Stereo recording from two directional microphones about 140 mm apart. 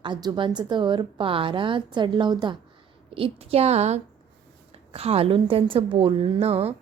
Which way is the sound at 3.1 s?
45° right (ahead or behind).